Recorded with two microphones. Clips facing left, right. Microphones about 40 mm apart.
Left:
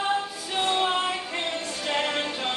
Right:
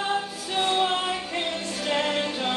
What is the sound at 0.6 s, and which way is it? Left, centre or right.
Music, centre.